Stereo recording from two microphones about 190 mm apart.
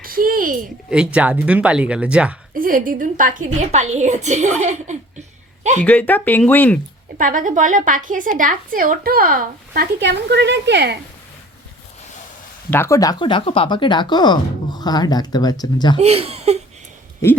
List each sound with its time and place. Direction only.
0.0 s a sound: 50° right (ahead or behind)
0.9 s speech: 5° right (ahead or behind)
2.5 s a woman's voice: 50° right (ahead or behind)
5.8 s speech: 5° left (ahead or behind)
7.2 s speech: 45° right (ahead or behind); by 10.9 s 65° right (ahead or behind)
12.7 s speech: 15° left (ahead or behind)
16.0 s a woman's voice: 30° right (ahead or behind)
17.2 s speech: 15° left (ahead or behind)